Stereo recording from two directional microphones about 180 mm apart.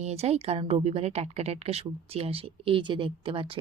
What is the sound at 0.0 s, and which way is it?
A woman's voice, 35° right (ahead or behind).